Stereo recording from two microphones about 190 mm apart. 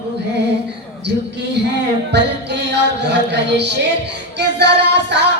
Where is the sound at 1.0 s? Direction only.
60° right (ahead or behind).